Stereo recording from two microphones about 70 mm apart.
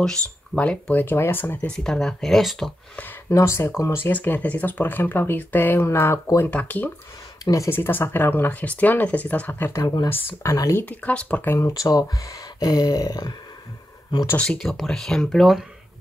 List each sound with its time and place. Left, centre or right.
0.0 s speech: centre
1.7 s speech: centre
3.3 s speech: left
5.9 s speech: left
6.5 s speech: left
7.7 s speech: left
10.4 s speech: left
10.8 s speech: left
11.5 s speech: left
14.4 s speech: centre